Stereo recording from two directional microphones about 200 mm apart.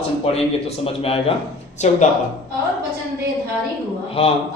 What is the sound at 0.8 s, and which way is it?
A man's voice, 30° left (ahead or behind).